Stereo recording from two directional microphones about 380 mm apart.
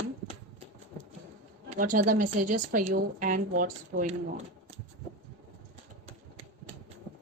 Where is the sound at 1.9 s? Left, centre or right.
Right.